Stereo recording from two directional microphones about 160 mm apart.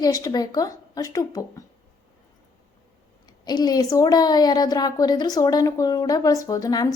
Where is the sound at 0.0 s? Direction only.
20° left (ahead or behind).